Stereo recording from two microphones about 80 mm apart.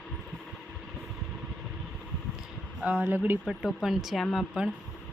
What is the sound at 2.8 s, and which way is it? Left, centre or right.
Speech, centre.